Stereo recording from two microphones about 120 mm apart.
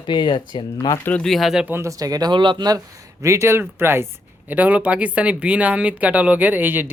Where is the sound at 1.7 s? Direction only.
25° right (ahead or behind).